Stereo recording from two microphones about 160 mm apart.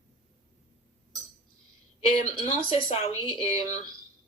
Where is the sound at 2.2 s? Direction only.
35° left (ahead or behind).